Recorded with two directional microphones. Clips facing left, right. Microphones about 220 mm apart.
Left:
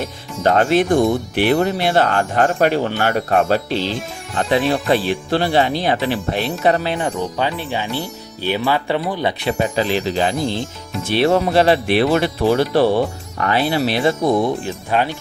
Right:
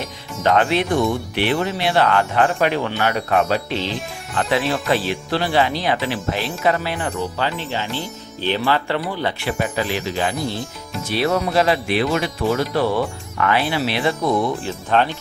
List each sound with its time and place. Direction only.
0.4 s speech: 40° left (ahead or behind)
4.4 s speech: 30° left (ahead or behind)
6.7 s speech: 30° left (ahead or behind)
9.6 s speech: 30° left (ahead or behind)
10.4 s speech: 5° right (ahead or behind)
11.1 s speech: 25° left (ahead or behind); by 14.2 s 45° left (ahead or behind)
14.3 s speech: 15° left (ahead or behind)